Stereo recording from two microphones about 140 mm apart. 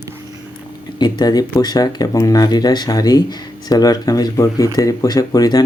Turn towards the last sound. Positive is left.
turn(degrees=30)  # may be behind; listen again after turning